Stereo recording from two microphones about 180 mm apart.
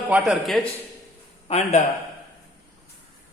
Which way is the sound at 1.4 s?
35° left (ahead or behind).